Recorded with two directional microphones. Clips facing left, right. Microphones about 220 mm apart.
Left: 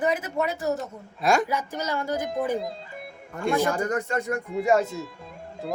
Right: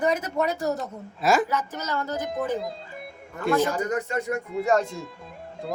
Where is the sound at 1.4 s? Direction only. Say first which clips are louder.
Left 1 dB; 10° left (ahead or behind).